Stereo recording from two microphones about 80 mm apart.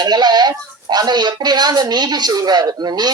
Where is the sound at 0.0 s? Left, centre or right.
Right.